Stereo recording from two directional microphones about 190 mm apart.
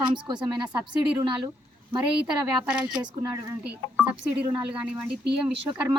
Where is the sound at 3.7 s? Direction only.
5° right (ahead or behind).